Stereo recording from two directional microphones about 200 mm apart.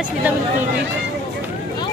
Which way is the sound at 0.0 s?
5° right (ahead or behind).